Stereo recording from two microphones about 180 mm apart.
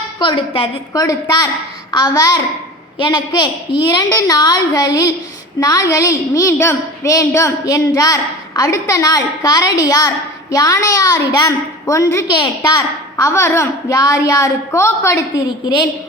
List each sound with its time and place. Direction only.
0.2 s a woman's voice: 25° left (ahead or behind)